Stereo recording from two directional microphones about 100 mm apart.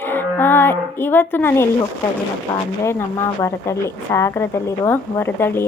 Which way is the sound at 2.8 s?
25° left (ahead or behind).